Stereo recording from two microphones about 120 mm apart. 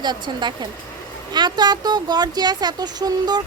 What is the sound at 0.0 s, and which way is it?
Speech, 40° right (ahead or behind).